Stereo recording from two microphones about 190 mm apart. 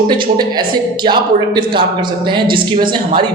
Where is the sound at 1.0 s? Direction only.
25° right (ahead or behind).